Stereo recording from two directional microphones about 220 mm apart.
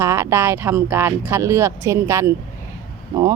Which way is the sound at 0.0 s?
15° right (ahead or behind).